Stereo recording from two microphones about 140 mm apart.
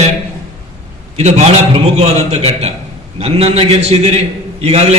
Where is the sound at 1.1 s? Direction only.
50° right (ahead or behind).